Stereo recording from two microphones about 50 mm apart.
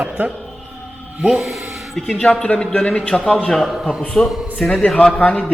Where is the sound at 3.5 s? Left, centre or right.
Centre.